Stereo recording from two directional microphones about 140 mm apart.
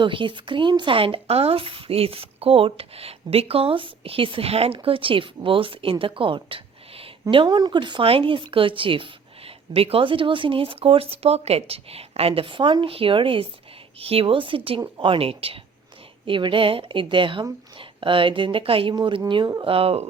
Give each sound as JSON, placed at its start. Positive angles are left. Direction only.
{"t": 0.0, "sound": "speech", "side_deg": -35}